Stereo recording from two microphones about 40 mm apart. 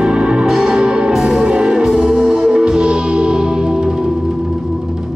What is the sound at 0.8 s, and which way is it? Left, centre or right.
Music, centre.